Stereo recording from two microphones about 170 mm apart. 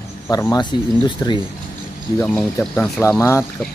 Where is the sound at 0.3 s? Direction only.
20° left (ahead or behind).